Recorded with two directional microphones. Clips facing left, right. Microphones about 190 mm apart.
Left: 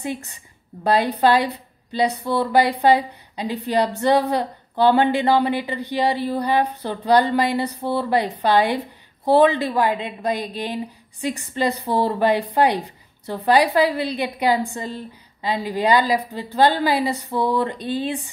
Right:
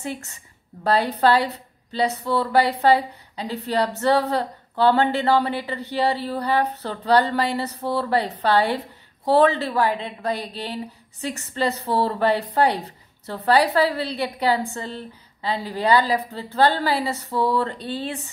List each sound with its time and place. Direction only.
0.0 s a woman's voice: 15° left (ahead or behind)